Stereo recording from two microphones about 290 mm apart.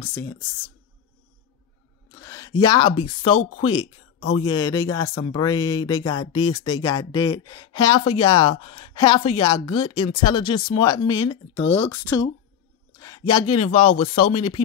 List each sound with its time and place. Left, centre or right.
0.1 s speech: centre
2.1 s speech: centre
3.7 s speech: left
4.4 s speech: centre
11.9 s speech: centre